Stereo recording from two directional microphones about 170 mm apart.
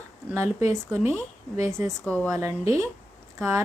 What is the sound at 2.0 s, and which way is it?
Speech, 10° left (ahead or behind).